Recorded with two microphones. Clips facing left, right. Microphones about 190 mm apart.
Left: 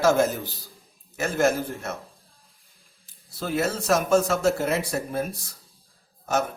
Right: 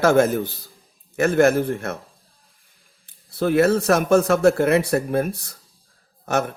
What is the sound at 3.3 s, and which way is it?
Speech, 60° right (ahead or behind).